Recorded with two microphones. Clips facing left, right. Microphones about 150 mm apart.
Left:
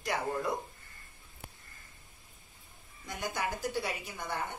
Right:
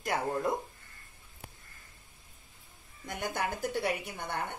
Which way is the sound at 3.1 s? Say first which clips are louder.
Right 1 dB; 55° right (ahead or behind).